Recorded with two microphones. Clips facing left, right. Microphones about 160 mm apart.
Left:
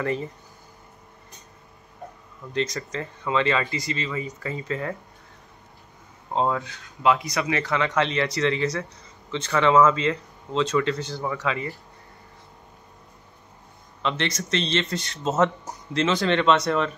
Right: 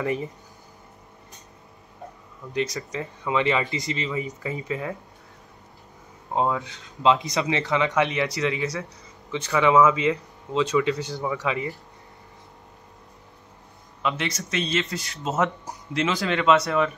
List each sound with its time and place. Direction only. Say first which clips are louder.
0.0 s speech: even; 15° right (ahead or behind)
2.5 s speech: even; 10° right (ahead or behind)
6.5 s speech: even; 20° right (ahead or behind)
14.0 s speech: left 1 dB; 10° right (ahead or behind)